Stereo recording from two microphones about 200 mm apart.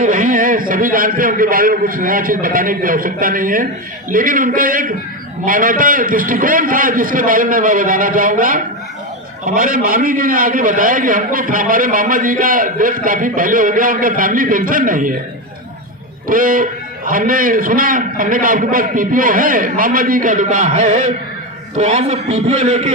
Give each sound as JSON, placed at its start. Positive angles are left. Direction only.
{"t": 0.0, "sound": "a man's voice", "side_deg": -45}
{"t": 16.2, "sound": "a man's voice", "side_deg": -45}